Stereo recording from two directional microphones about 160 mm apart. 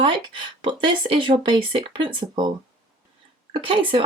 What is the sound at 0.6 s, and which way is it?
Speech, 30° right (ahead or behind).